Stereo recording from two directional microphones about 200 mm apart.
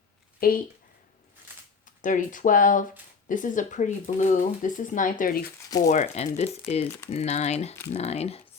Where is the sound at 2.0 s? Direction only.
40° left (ahead or behind).